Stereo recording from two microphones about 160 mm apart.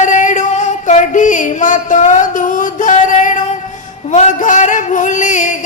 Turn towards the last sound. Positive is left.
turn(degrees=50)  # may be behind; listen again after turning